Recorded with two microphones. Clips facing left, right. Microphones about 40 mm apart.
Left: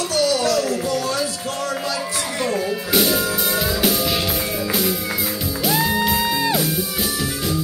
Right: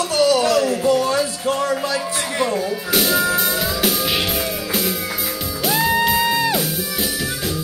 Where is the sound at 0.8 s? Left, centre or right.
Right.